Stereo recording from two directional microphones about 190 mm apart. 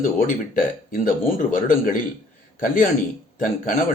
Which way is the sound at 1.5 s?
45° left (ahead or behind).